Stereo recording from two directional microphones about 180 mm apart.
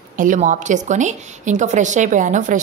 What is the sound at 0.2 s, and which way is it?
A woman's voice, 45° right (ahead or behind).